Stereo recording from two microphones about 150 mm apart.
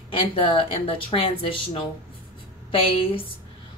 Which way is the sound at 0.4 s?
35° left (ahead or behind).